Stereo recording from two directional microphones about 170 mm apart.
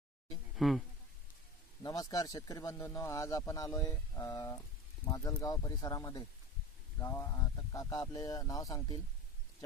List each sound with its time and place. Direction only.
0.5 s speech: centre (ahead or behind)
1.8 s speech: 20° left (ahead or behind)